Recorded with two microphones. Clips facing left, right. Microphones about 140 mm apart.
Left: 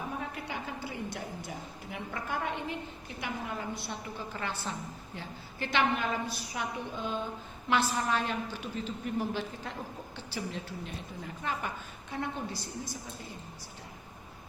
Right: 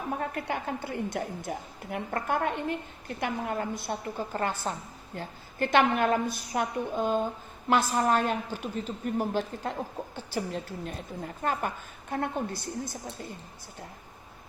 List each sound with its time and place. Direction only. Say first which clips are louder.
0.2 s a woman's voice: right 6 dB; 55° right (ahead or behind)